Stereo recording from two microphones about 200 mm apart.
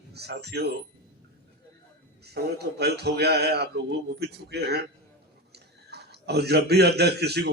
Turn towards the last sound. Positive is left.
turn(degrees=-55)  # may be behind; listen again after turning